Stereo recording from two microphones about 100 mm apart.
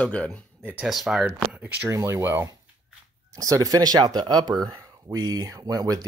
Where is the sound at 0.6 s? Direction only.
20° right (ahead or behind).